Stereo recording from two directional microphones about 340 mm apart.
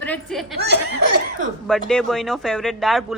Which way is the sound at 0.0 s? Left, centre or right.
Centre.